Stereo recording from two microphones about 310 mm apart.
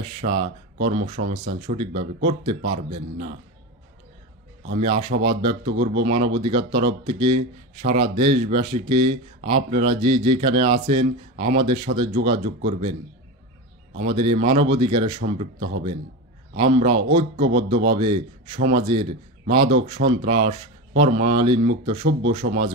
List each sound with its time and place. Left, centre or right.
0.2 s speech: centre
4.7 s speech: centre
14.2 s speech: centre